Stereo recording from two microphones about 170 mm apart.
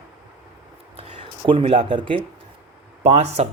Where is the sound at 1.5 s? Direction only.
35° right (ahead or behind).